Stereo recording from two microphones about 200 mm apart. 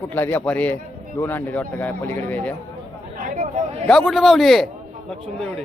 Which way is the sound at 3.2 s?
40° right (ahead or behind).